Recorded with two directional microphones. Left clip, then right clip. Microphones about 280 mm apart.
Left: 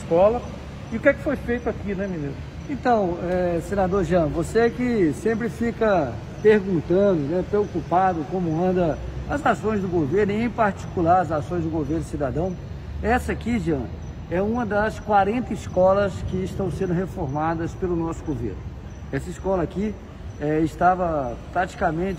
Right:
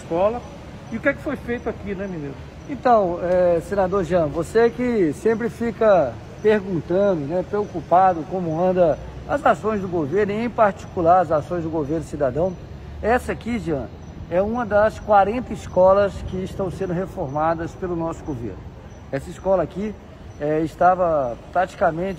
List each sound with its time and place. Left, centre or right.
0.1 s speech: centre
2.7 s speech: centre
19.1 s speech: centre